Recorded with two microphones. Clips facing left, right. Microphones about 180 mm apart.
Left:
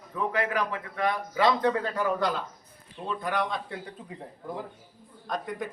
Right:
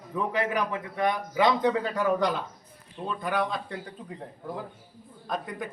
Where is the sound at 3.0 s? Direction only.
Centre (ahead or behind).